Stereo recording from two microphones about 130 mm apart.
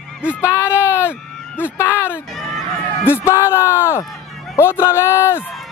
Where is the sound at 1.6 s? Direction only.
15° left (ahead or behind).